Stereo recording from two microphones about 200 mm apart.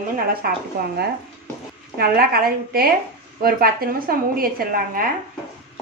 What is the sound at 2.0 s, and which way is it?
A woman's voice, 50° right (ahead or behind).